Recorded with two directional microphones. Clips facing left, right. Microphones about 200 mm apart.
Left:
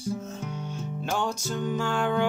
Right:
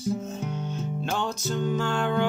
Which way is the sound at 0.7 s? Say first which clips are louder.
Left 1 dB; 10° left (ahead or behind).